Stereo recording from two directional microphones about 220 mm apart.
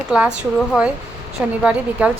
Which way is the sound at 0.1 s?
5° right (ahead or behind).